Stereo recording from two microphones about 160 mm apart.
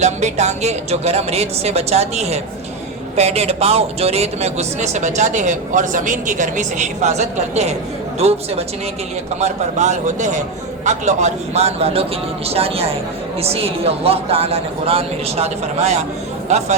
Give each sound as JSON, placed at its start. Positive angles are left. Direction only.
{"t": 0.0, "sound": "a man's voice", "side_deg": -45}